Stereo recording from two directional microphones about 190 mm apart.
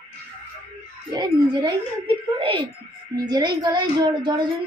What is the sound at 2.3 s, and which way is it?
A woman's voice, 25° right (ahead or behind).